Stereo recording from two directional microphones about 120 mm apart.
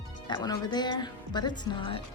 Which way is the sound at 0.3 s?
35° left (ahead or behind).